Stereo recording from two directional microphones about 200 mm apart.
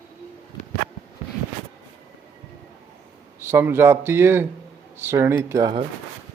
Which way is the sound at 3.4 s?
10° right (ahead or behind).